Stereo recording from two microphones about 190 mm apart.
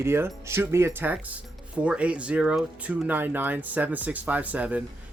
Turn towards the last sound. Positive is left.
turn(degrees=-5)  # may be behind; listen again after turning